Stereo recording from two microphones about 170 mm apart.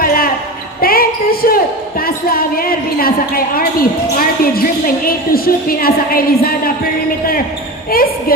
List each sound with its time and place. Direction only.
0.0 s a sound: 60° left (ahead or behind)
2.0 s speech: 60° left (ahead or behind)
5.0 s speech: 60° left (ahead or behind)
7.9 s speech: 60° left (ahead or behind)